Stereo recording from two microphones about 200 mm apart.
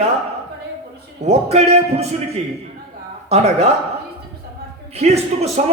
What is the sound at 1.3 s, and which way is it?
Speech, 30° right (ahead or behind).